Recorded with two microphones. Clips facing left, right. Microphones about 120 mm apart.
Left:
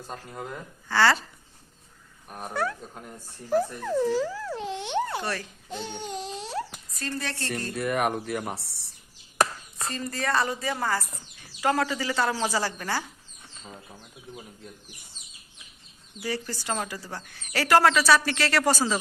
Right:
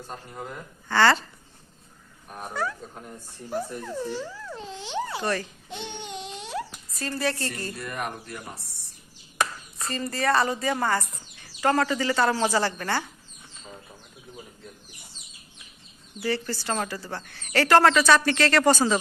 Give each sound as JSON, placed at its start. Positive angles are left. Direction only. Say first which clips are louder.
{"t": 0.9, "sound": "speech", "louder": "right 2 dB", "side_deg": 5}
{"t": 2.6, "sound": "speech", "louder": "left 1 dB", "side_deg": 60}
{"t": 3.8, "sound": "speech", "louder": "left 7 dB", "side_deg": 90}
{"t": 5.2, "sound": "a child's voice", "louder": "right 4 dB", "side_deg": 0}
{"t": 6.0, "sound": "a sound", "louder": "left 2 dB", "side_deg": 40}
{"t": 6.9, "sound": "speech", "louder": "right 5 dB", "side_deg": -5}
{"t": 7.8, "sound": "speech", "louder": "left 7 dB", "side_deg": 65}
{"t": 9.8, "sound": "speech", "louder": "right 4 dB", "side_deg": 0}
{"t": 16.2, "sound": "speech", "louder": "right 3 dB", "side_deg": 10}